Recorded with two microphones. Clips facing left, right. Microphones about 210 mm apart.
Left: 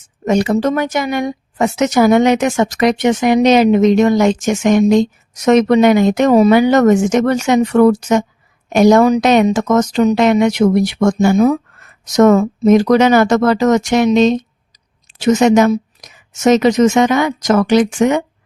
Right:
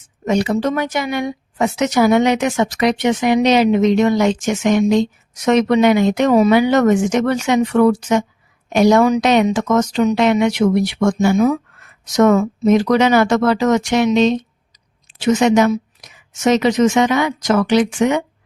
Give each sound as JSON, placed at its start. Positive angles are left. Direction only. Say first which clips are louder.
{"t": 0.3, "sound": "speech", "louder": "left 3 dB", "side_deg": 45}